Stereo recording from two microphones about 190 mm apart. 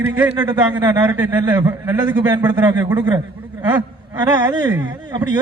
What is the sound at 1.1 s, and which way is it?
A man's voice, 10° right (ahead or behind).